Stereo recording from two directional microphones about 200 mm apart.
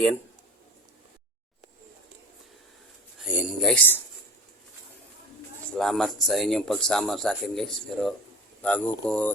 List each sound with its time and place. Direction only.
3.2 s a man's voice: 5° right (ahead or behind)
5.7 s a man's voice: centre (ahead or behind)